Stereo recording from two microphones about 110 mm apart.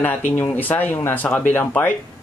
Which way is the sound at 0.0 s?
15° left (ahead or behind).